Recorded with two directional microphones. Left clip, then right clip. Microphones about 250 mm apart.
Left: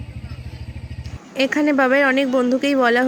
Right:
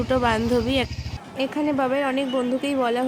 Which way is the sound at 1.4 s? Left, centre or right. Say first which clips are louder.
Left 6 dB; centre.